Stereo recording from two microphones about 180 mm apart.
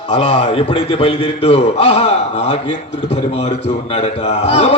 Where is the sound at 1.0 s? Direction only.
35° left (ahead or behind).